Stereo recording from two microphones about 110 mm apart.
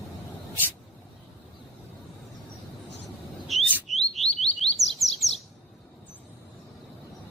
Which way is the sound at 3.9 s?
Centre (ahead or behind).